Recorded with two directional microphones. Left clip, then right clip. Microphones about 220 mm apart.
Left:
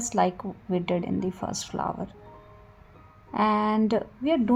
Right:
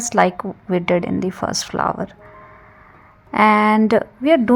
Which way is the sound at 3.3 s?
25° right (ahead or behind).